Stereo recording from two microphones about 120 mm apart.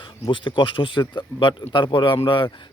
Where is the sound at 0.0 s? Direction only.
45° left (ahead or behind).